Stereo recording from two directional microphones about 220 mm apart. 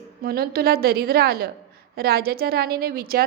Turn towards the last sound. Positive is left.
turn(degrees=-45)  # may be behind; listen again after turning